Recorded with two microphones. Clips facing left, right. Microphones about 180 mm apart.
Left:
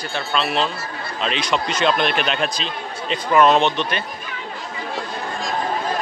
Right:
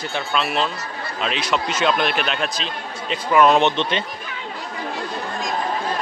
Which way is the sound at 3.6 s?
25° right (ahead or behind).